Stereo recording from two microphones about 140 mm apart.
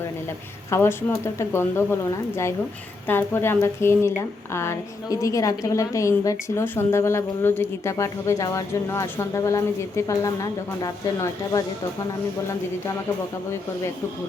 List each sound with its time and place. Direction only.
0.7 s a woman's voice: 15° left (ahead or behind)